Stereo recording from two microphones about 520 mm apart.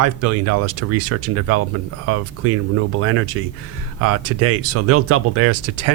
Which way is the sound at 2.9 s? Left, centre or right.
Right.